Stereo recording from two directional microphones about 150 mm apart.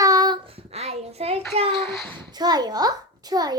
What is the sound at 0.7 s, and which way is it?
Speech, 45° right (ahead or behind).